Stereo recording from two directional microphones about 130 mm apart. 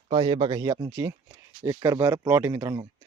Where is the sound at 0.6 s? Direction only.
25° right (ahead or behind).